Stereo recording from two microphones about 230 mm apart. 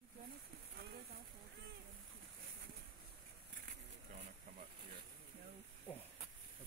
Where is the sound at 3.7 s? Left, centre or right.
Right.